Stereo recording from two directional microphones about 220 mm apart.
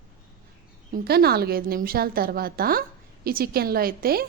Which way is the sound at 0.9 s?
45° right (ahead or behind).